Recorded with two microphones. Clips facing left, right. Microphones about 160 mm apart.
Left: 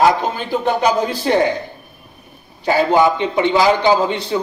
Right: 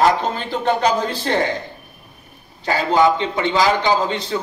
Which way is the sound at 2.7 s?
15° left (ahead or behind).